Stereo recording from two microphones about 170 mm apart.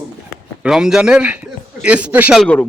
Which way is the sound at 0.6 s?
5° right (ahead or behind).